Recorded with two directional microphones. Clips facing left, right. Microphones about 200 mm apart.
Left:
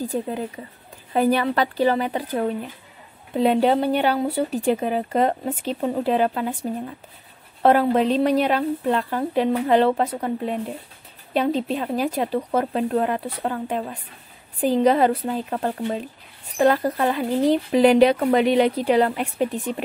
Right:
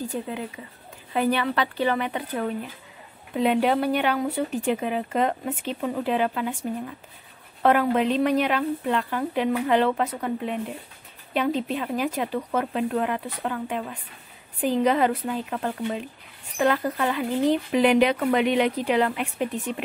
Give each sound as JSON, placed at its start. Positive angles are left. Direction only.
{"t": 0.1, "sound": "speech", "side_deg": 35}
{"t": 7.6, "sound": "speech", "side_deg": 35}